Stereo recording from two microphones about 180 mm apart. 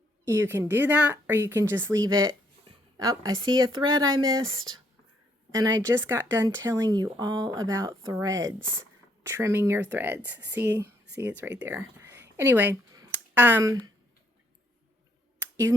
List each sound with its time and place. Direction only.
0.3 s a woman's voice: 15° right (ahead or behind)